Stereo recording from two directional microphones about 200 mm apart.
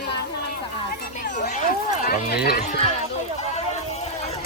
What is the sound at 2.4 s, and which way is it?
Speech, 45° left (ahead or behind).